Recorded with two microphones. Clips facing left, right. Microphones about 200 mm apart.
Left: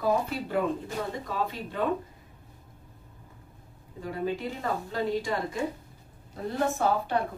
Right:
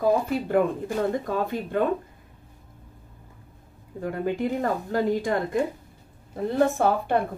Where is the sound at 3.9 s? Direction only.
55° right (ahead or behind).